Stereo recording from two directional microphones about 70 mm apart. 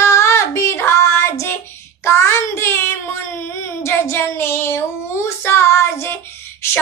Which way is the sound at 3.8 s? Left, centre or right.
Left.